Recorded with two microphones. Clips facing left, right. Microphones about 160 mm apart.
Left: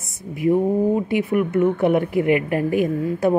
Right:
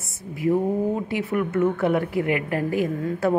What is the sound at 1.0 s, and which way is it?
A woman's voice, 15° left (ahead or behind).